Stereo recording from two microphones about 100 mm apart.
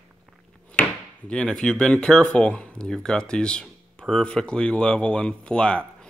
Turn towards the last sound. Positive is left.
turn(degrees=10)  # may be behind; listen again after turning